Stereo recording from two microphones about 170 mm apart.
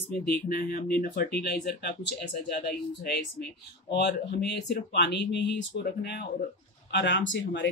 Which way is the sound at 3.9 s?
80° left.